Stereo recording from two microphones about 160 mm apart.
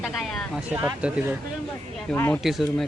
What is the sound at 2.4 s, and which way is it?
Speech, centre (ahead or behind).